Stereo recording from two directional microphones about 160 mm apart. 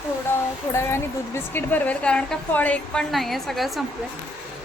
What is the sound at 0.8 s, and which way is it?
A woman's voice, 15° left (ahead or behind).